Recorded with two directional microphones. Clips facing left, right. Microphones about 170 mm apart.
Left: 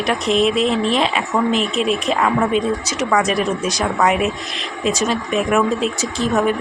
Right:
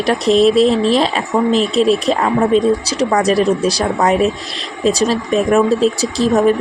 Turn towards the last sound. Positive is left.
turn(degrees=-35)  # may be behind; listen again after turning